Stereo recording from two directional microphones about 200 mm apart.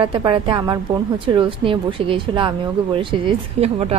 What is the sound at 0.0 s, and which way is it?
A woman's voice, 25° right (ahead or behind).